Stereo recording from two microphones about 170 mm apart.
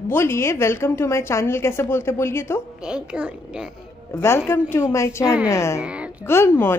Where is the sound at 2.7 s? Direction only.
5° right (ahead or behind).